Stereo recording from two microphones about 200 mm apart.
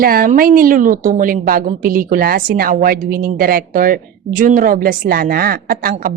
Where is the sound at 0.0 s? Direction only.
45° right (ahead or behind).